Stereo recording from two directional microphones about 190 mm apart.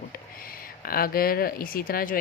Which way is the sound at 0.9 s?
50° left (ahead or behind).